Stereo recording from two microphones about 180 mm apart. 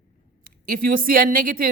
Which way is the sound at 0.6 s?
50° right (ahead or behind).